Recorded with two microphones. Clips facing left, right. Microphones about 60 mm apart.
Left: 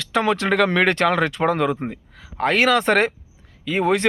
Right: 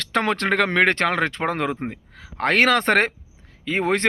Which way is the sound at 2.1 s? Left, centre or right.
Right.